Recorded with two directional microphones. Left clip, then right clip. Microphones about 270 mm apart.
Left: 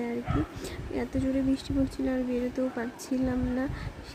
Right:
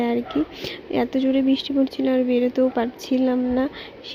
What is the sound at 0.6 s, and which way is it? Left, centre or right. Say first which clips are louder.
Speech: right 10 dB; centre.